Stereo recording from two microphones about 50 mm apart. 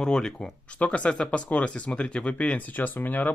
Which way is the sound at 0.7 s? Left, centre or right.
Left.